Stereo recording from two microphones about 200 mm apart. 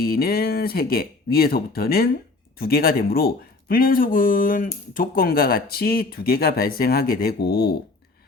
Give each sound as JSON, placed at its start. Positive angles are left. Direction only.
{"t": 0.0, "sound": "speech", "side_deg": 50}